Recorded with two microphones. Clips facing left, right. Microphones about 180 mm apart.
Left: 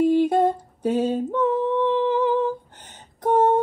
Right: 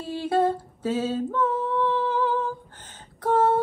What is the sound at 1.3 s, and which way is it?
Humming, 15° left (ahead or behind).